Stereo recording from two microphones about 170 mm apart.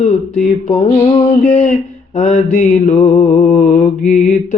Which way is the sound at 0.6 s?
35° left (ahead or behind).